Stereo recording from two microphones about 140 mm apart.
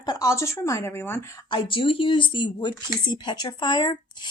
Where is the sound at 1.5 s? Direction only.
35° left (ahead or behind).